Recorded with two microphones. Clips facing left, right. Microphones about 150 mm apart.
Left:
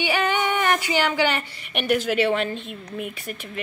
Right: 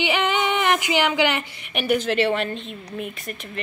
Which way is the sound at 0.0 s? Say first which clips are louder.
Right 1 dB; 20° right (ahead or behind).